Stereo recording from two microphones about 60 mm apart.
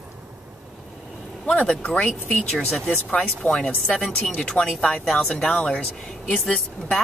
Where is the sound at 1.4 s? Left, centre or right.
Left.